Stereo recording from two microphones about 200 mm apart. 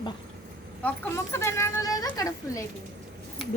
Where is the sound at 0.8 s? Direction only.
10° left (ahead or behind).